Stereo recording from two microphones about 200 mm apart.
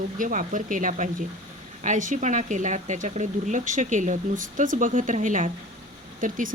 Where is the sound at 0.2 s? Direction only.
40° right (ahead or behind).